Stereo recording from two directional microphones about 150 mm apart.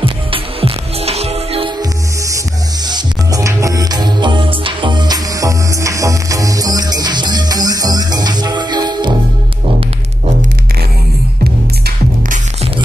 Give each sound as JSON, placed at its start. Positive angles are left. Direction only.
{"t": 0.0, "sound": "music", "side_deg": -35}
{"t": 2.9, "sound": "music", "side_deg": -20}